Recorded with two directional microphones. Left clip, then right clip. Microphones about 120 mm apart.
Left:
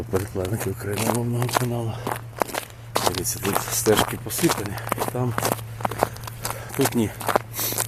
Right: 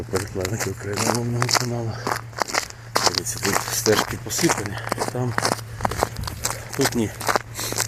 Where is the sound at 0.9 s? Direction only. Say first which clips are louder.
Right 1 dB; centre (ahead or behind).